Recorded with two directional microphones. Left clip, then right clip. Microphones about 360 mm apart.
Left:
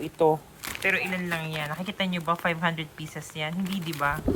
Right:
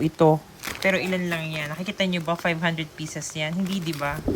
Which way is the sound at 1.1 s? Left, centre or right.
Centre.